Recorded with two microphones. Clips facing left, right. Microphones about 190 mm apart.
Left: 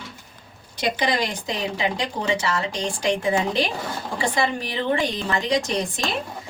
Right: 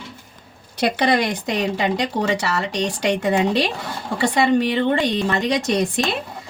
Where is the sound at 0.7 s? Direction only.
65° right (ahead or behind).